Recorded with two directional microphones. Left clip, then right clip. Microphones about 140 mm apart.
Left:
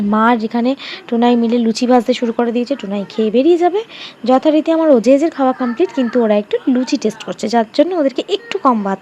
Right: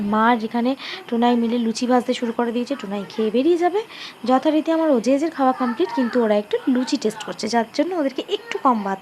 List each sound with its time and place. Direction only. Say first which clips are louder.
0.1 s a woman's voice: left 4 dB; 30° left (ahead or behind)
5.5 s a woman's voice: left 4 dB; 20° left (ahead or behind)